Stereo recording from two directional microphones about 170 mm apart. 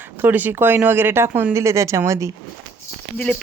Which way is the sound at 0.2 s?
10° right (ahead or behind).